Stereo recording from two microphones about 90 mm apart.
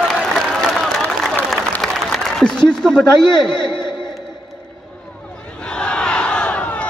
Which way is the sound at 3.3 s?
60° left (ahead or behind).